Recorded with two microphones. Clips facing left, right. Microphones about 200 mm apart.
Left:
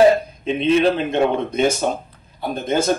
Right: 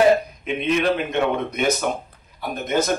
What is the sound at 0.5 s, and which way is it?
A man's voice, 30° left (ahead or behind).